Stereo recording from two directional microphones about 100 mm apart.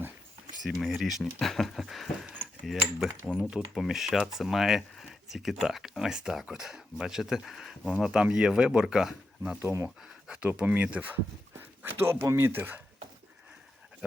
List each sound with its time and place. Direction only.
0.6 s speech: centre (ahead or behind)
9.6 s speech: 25° right (ahead or behind)
10.0 s speech: 5° right (ahead or behind)